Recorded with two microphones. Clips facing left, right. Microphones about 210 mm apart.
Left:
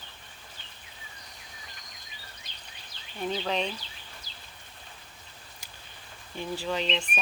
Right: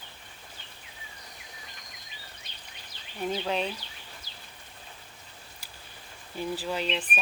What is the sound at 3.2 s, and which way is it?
Speech, 5° right (ahead or behind).